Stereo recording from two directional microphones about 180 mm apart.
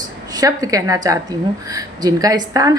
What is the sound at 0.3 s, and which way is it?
A woman's voice, 20° right (ahead or behind).